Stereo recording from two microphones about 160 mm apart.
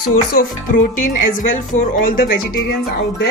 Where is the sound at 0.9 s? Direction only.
55° left (ahead or behind); by 2.7 s 70° left (ahead or behind).